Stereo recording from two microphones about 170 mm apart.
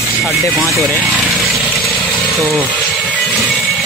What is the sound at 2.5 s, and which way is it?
Music, 10° left (ahead or behind).